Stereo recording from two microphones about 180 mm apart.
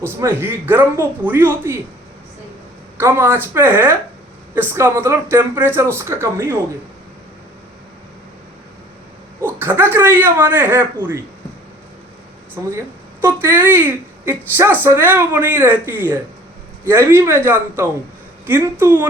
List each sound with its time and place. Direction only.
0.0 s a woman's voice: 15° right (ahead or behind)
3.0 s a woman's voice: 15° right (ahead or behind)
9.4 s a woman's voice: 10° right (ahead or behind)
12.6 s a woman's voice: 15° right (ahead or behind)